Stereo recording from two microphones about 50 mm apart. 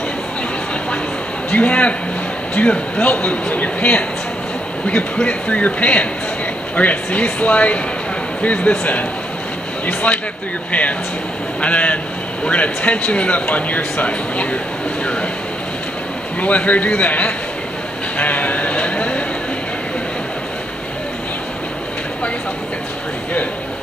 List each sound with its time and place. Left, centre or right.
1.5 s speech: left
16.3 s speech: left
18.1 s a sound: left